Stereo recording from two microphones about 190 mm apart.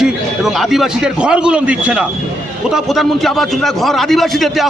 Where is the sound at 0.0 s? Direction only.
Centre (ahead or behind).